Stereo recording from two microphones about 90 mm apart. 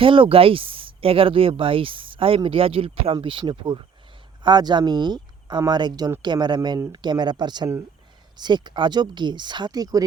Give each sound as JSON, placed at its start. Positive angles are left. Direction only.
{"t": 0.0, "sound": "speech", "side_deg": -75}
{"t": 3.5, "sound": "speech", "side_deg": -65}
{"t": 4.4, "sound": "speech", "side_deg": -55}